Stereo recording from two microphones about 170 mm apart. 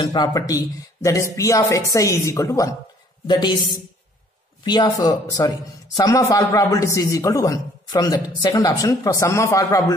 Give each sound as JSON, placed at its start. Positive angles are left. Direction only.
{"t": 0.0, "sound": "a man's voice", "side_deg": 25}
{"t": 4.6, "sound": "a man's voice", "side_deg": 25}